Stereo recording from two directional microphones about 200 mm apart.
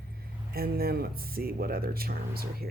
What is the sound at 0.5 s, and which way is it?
Speech, 50° right (ahead or behind).